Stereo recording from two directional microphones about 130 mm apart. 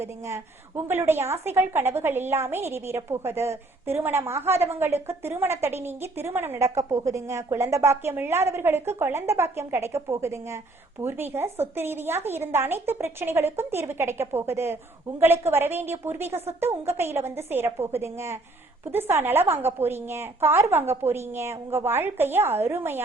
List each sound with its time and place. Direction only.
0.0 s a woman's voice: 20° right (ahead or behind)